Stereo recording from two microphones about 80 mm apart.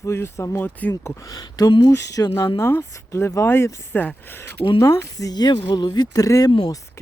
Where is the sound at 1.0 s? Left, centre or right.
Left.